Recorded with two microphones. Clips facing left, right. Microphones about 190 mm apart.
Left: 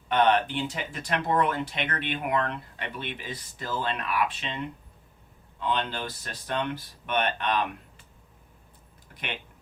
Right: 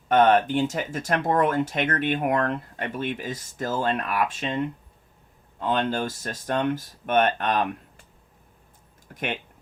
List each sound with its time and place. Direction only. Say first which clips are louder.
0.1 s speech: right 5 dB; 45° right (ahead or behind)
9.1 s speech: right 7 dB; 45° right (ahead or behind)